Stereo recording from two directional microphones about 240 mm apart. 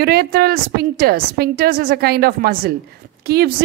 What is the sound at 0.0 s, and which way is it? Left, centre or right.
A woman's voice, right.